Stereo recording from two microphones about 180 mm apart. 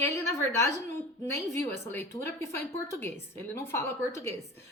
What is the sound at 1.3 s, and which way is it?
A woman's voice, 15° left (ahead or behind).